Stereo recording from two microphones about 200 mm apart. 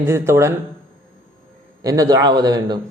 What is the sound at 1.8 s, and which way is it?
Speech, 15° right (ahead or behind).